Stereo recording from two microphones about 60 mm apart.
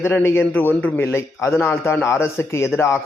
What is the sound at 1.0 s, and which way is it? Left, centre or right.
A man's voice, left.